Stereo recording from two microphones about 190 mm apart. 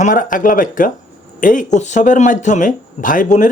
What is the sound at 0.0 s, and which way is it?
Speech, 45° left (ahead or behind).